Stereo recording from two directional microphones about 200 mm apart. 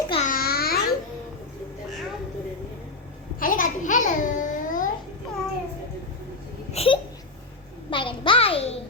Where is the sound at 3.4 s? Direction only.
40° left (ahead or behind).